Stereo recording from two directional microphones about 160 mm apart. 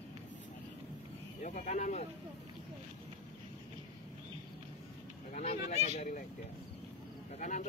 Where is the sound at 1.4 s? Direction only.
50° left (ahead or behind).